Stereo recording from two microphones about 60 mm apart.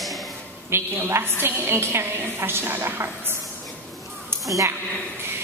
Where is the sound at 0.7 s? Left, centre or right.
Right.